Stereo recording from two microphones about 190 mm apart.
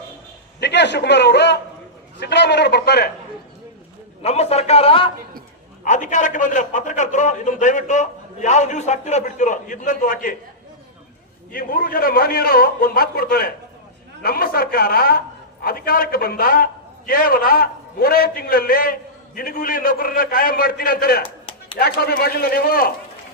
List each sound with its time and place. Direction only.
0.6 s a man's voice: 65° left (ahead or behind)
4.2 s a man's voice: 35° left (ahead or behind)
5.8 s a man's voice: 40° left (ahead or behind)
11.5 s a man's voice: 50° left (ahead or behind)